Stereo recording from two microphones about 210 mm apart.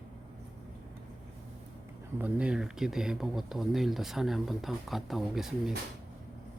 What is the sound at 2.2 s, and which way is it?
Speech, 5° right (ahead or behind).